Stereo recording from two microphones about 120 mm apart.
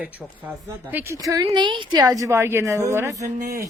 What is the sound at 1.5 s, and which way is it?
A woman's voice, 40° right (ahead or behind).